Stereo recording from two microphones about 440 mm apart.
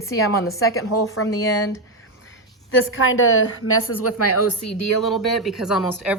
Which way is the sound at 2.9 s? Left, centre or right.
Left.